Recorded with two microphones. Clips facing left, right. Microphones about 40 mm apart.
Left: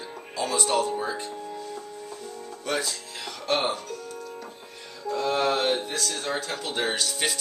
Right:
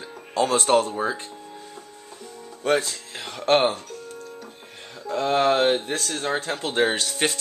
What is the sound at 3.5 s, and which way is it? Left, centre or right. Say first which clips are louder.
Speech: right 7 dB; right.